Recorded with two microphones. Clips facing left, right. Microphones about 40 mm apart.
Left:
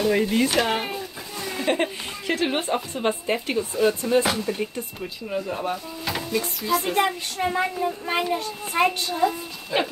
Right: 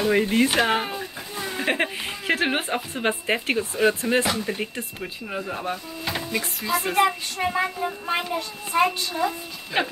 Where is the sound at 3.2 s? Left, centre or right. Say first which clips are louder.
Right 1 dB; right.